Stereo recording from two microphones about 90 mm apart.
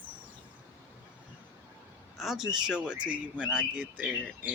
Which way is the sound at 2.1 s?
5° right (ahead or behind).